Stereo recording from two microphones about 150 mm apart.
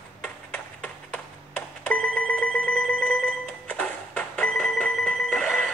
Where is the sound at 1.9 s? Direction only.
10° left (ahead or behind).